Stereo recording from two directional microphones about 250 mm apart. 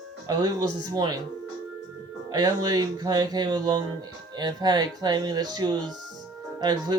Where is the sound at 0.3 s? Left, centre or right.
Centre.